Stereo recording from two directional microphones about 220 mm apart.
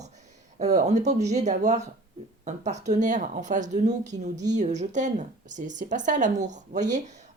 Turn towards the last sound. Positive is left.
turn(degrees=-35)  # may be behind; listen again after turning